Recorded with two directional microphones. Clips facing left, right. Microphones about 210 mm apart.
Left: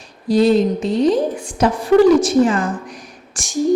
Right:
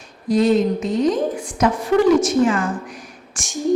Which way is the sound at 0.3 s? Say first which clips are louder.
Left 2 dB; 35° left (ahead or behind).